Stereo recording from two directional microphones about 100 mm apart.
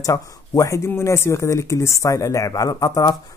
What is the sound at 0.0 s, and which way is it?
Speech, 35° left (ahead or behind).